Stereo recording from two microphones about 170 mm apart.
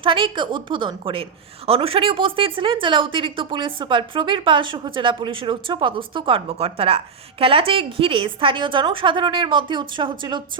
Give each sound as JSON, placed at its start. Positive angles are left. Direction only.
{"t": 0.0, "sound": "a woman's voice", "side_deg": -30}